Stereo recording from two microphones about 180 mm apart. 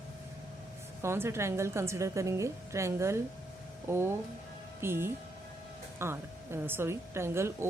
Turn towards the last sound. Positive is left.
turn(degrees=-15)  # may be behind; listen again after turning